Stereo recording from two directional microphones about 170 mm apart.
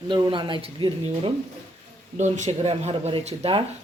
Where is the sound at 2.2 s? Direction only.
45° right (ahead or behind).